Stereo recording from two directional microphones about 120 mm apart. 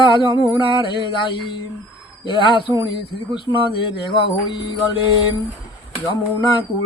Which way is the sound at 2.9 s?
45° left (ahead or behind).